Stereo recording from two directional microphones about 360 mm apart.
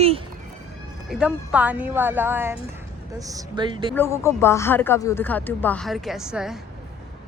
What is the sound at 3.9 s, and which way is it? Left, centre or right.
Speech, centre.